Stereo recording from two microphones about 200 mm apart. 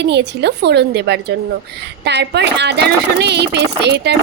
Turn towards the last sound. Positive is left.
turn(degrees=-55)  # may be behind; listen again after turning